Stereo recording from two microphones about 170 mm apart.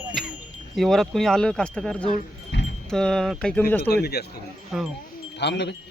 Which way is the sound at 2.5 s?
90° left.